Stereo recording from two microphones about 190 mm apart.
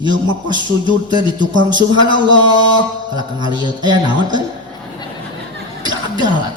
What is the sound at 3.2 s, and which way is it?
Speech, 25° right (ahead or behind).